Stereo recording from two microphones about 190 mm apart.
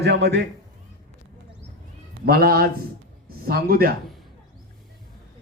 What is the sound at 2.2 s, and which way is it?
A man's voice, 55° right (ahead or behind).